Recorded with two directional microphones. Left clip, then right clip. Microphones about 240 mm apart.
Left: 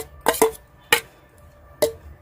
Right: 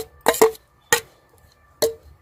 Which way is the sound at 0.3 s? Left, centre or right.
Right.